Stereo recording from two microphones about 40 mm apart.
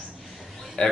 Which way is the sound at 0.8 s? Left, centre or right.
Left.